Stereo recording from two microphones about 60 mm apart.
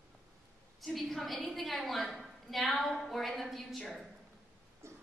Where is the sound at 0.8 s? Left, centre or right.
Centre.